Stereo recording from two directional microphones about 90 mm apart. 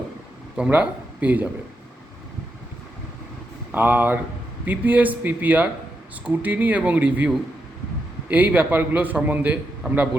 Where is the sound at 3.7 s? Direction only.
20° right (ahead or behind).